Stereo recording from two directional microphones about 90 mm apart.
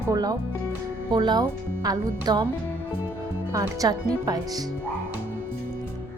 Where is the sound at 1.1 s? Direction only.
60° right (ahead or behind).